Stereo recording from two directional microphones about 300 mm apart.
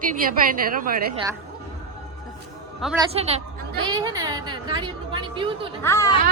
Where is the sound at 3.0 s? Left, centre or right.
Centre.